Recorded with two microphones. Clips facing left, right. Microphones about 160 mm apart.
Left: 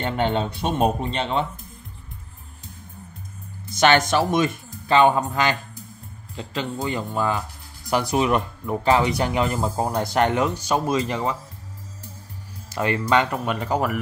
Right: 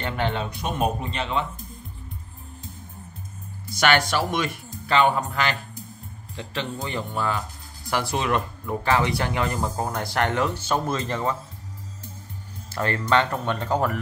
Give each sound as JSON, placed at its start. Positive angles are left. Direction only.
{"t": 0.0, "sound": "speech", "side_deg": 25}
{"t": 3.6, "sound": "speech", "side_deg": 20}
{"t": 12.7, "sound": "speech", "side_deg": 15}